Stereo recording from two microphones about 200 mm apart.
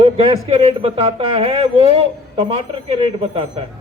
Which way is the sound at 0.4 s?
30° right (ahead or behind).